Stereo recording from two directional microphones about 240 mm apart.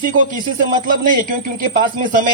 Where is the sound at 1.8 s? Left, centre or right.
Right.